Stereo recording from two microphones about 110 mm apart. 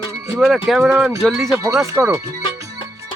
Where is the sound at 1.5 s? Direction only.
25° right (ahead or behind).